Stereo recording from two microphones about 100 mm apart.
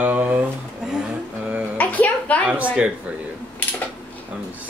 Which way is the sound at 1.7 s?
15° left (ahead or behind).